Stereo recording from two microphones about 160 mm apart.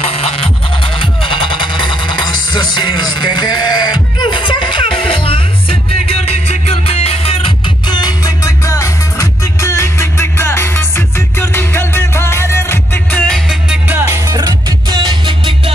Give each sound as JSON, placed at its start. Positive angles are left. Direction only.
{"t": 0.0, "sound": "music", "side_deg": 40}
{"t": 13.8, "sound": "music", "side_deg": -15}